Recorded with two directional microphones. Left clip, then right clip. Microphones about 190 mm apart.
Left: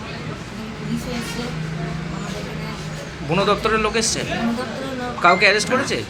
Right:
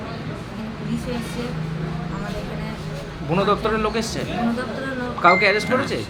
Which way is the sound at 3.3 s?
Centre (ahead or behind).